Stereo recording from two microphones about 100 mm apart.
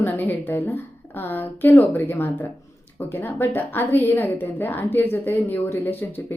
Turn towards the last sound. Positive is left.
turn(degrees=20)  # may be behind; listen again after turning